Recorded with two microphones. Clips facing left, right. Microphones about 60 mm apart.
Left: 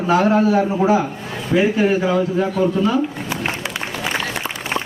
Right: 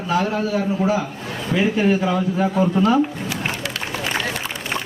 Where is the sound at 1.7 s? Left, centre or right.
Centre.